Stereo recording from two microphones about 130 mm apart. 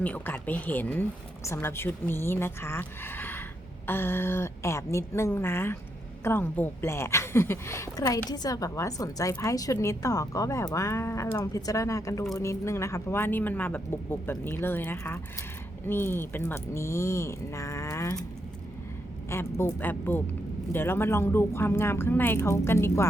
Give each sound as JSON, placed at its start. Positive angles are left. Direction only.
{"t": 0.0, "sound": "speech", "side_deg": 10}
{"t": 19.3, "sound": "speech", "side_deg": 20}